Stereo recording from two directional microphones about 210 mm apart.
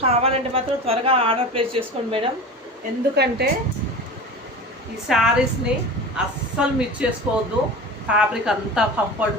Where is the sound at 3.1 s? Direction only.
50° right (ahead or behind).